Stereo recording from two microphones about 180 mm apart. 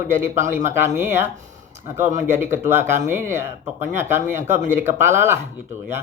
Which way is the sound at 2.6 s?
15° right (ahead or behind).